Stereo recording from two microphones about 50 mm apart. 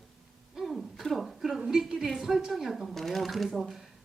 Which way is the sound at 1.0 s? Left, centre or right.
Centre.